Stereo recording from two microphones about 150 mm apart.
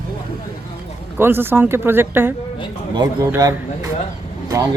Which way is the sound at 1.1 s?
15° right (ahead or behind).